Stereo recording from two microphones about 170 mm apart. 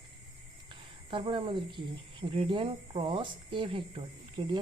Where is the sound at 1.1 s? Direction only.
30° right (ahead or behind).